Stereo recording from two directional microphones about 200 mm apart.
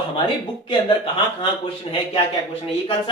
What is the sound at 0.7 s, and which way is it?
Speech, 25° left (ahead or behind).